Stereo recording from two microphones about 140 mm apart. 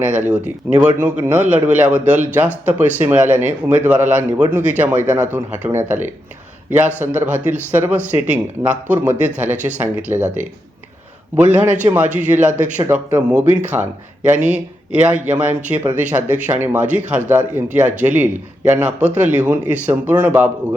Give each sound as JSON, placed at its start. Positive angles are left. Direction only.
{"t": 0.1, "sound": "speech", "side_deg": -15}
{"t": 10.1, "sound": "speech", "side_deg": -20}
{"t": 11.3, "sound": "speech", "side_deg": -10}